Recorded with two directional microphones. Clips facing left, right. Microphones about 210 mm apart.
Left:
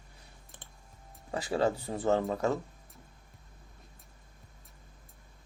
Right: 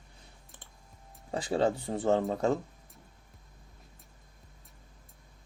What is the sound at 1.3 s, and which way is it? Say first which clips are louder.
Speech: right 1 dB; 25° right (ahead or behind).